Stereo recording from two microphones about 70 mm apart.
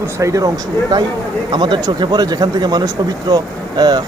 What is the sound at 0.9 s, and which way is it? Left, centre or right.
Speech, right.